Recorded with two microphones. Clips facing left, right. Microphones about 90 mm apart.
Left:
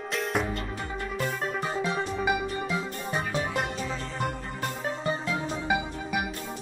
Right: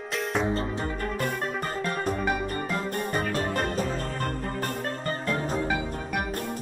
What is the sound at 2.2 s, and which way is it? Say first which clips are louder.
Music: even; 5° left (ahead or behind).